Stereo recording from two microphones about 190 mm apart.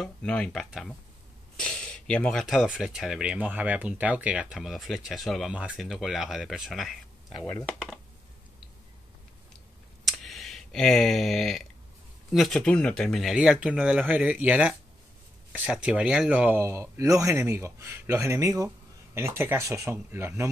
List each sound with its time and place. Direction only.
0.0 s speech: 5° left (ahead or behind)
10.0 s a sound: centre (ahead or behind)
12.3 s speech: centre (ahead or behind)